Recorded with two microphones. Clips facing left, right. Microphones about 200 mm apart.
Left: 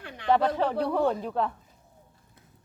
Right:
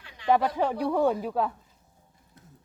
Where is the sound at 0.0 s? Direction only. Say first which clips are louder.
Left 10 dB; 55° left (ahead or behind).